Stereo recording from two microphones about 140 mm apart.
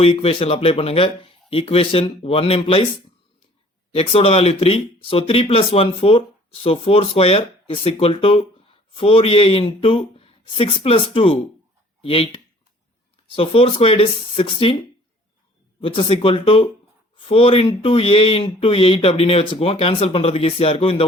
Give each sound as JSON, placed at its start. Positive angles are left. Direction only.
{"t": 0.0, "sound": "speech", "side_deg": 45}
{"t": 3.9, "sound": "speech", "side_deg": 45}
{"t": 15.8, "sound": "speech", "side_deg": 40}